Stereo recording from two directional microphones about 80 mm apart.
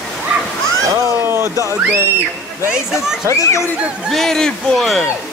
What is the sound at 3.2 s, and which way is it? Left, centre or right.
Speech, left.